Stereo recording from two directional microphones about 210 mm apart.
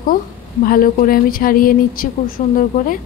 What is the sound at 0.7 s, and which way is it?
Speech, 45° left (ahead or behind).